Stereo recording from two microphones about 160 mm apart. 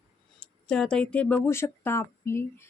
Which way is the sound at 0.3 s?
5° left (ahead or behind).